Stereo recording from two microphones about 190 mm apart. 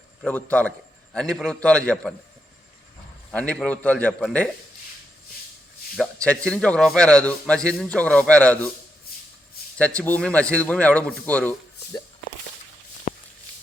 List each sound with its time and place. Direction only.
0.2 s a man's voice: 10° left (ahead or behind)
3.3 s a man's voice: 5° left (ahead or behind)
6.2 s a man's voice: 5° left (ahead or behind)
9.7 s a man's voice: 5° left (ahead or behind)
13.1 s a sound: 45° left (ahead or behind)